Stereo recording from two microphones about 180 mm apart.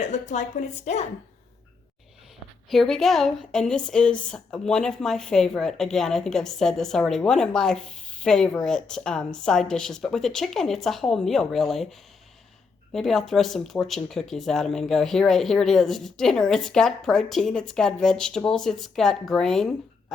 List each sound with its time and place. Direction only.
0.0 s a woman's voice: 40° left (ahead or behind)
2.6 s a woman's voice: centre (ahead or behind)